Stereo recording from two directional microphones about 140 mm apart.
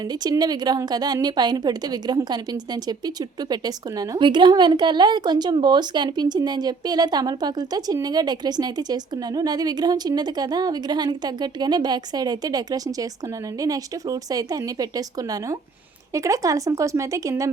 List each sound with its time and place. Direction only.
0.1 s a woman's voice: 30° right (ahead or behind)